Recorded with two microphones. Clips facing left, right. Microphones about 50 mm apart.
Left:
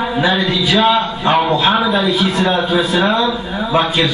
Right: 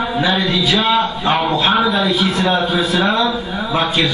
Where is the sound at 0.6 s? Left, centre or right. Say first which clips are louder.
Left 3 dB; left.